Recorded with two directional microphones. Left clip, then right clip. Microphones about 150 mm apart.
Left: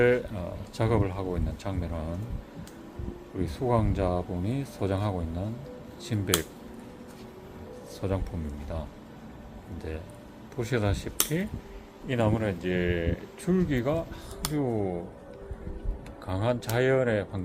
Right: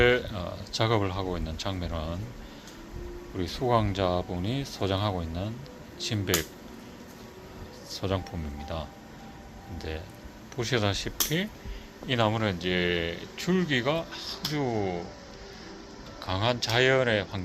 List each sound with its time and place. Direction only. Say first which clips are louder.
0.0 s speech: right 1 dB; 15° left (ahead or behind)
3.3 s speech: right 2 dB; 15° left (ahead or behind)
7.9 s speech: right 1 dB; 15° left (ahead or behind)
9.7 s speech: right 1 dB; 15° left (ahead or behind)
16.2 s speech: right 2 dB; 25° left (ahead or behind)